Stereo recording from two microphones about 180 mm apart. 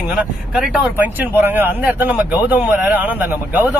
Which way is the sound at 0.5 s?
5° right (ahead or behind).